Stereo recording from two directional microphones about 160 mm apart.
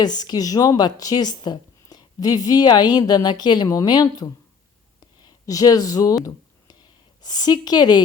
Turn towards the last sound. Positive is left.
turn(degrees=25)  # may be behind; listen again after turning